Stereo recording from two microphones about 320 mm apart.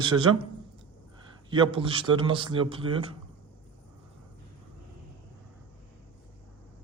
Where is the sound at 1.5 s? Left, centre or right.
Centre.